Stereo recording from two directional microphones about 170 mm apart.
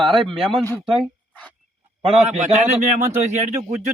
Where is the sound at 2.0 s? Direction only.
40° right (ahead or behind).